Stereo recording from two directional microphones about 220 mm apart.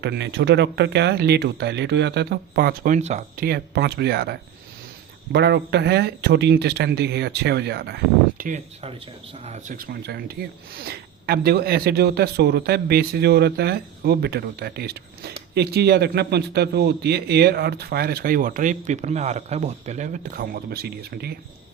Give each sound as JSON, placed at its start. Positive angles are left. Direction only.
{"t": 0.0, "sound": "speech", "side_deg": -50}